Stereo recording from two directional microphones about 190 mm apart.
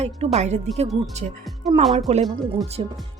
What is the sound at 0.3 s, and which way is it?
Speech, 35° right (ahead or behind).